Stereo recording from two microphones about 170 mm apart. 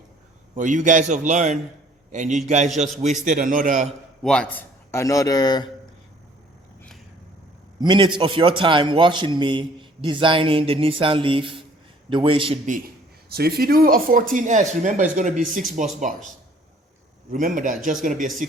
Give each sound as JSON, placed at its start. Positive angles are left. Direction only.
{"t": 0.5, "sound": "speech", "side_deg": -50}
{"t": 4.2, "sound": "a man's voice", "side_deg": 5}
{"t": 4.9, "sound": "speech", "side_deg": 15}
{"t": 7.8, "sound": "a man's voice", "side_deg": -25}
{"t": 13.3, "sound": "speech", "side_deg": -65}
{"t": 17.3, "sound": "speech", "side_deg": -50}